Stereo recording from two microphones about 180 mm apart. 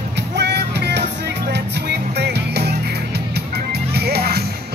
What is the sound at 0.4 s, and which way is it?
Music, 70° right (ahead or behind).